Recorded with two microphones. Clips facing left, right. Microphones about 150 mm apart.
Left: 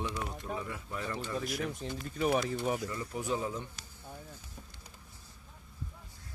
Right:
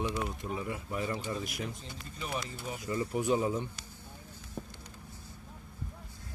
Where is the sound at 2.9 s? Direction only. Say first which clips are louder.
Right 5 dB; 15° right (ahead or behind).